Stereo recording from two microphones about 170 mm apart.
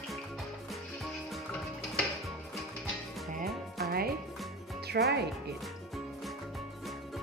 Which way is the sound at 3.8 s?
65° right (ahead or behind).